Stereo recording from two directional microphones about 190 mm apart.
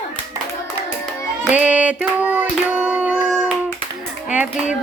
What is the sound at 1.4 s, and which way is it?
Child singing, 5° right (ahead or behind).